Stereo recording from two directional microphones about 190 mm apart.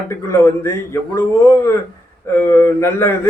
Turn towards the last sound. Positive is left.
turn(degrees=15)  # may be behind; listen again after turning